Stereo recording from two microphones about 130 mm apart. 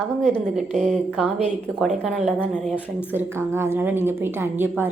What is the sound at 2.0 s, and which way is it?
Speech, centre (ahead or behind).